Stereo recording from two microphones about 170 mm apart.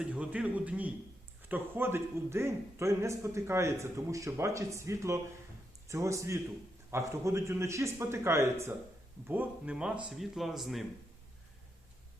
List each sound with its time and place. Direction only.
0.0 s a man's voice: 10° right (ahead or behind)